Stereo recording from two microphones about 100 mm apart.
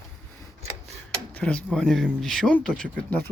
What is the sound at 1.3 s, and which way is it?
Speech, 10° left (ahead or behind).